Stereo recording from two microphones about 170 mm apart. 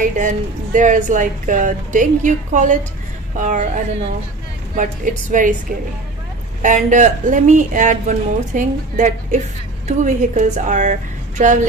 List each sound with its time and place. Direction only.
0.0 s speech: 50° right (ahead or behind)